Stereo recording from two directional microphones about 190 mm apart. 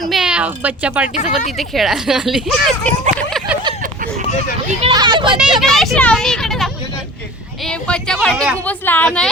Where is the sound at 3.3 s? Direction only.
Centre (ahead or behind).